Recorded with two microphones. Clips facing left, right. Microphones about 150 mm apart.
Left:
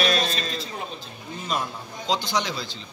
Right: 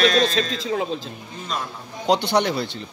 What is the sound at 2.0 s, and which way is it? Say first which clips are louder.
Speech: right 7 dB; 65° right (ahead or behind).